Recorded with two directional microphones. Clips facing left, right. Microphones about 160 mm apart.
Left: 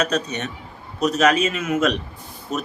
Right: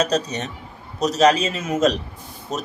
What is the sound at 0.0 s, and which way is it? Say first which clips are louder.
A man's voice: right 1 dB; 35° right (ahead or behind).